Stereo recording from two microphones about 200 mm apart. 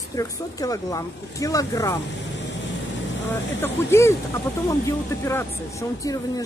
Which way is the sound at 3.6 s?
15° left (ahead or behind).